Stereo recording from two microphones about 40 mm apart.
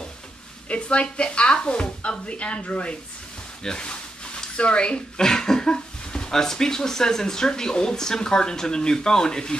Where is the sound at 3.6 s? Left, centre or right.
Centre.